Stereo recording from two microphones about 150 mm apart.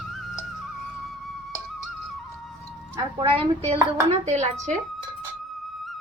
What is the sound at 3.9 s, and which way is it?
Speech, 45° right (ahead or behind).